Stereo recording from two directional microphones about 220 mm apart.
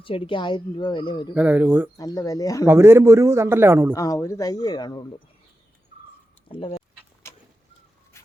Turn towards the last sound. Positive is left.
turn(degrees=25)  # may be behind; listen again after turning